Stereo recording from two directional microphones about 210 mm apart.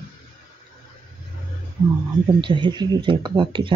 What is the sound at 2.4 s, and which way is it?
Speech, 20° right (ahead or behind).